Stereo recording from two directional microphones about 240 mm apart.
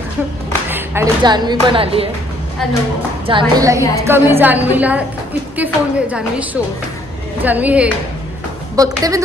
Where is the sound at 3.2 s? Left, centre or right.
Centre.